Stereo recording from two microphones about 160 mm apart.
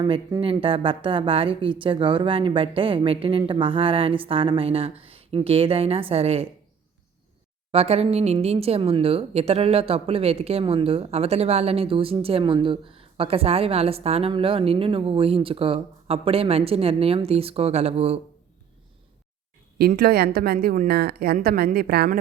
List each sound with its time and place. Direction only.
0.0 s speech: 30° right (ahead or behind)
7.7 s speech: 40° right (ahead or behind)
19.8 s a woman's voice: 75° right (ahead or behind)
21.3 s a woman's voice: 70° right (ahead or behind)